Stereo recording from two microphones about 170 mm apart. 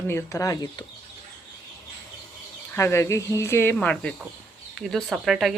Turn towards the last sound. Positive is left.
turn(degrees=0)  # may be behind; listen again after turning